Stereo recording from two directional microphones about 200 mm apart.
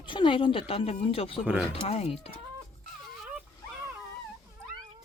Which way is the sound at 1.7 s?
30° left (ahead or behind).